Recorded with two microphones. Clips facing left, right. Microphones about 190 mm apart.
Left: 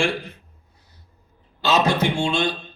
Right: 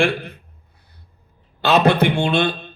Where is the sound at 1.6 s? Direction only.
60° right (ahead or behind).